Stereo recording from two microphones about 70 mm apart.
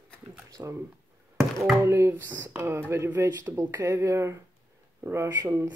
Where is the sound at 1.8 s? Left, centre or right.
Right.